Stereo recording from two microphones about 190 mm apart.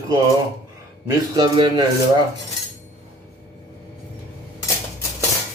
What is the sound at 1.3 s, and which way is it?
Speech, 25° right (ahead or behind).